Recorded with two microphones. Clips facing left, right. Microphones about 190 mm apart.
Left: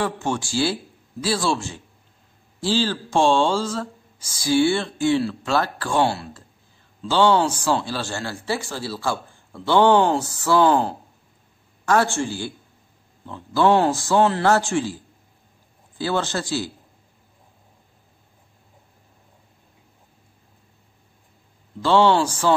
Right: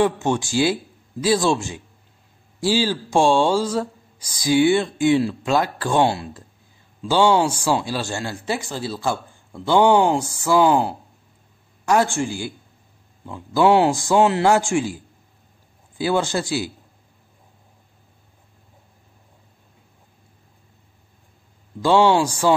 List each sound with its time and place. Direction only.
0.0 s a man's voice: 20° right (ahead or behind)
16.0 s a man's voice: 15° right (ahead or behind)
21.8 s a man's voice: 15° right (ahead or behind)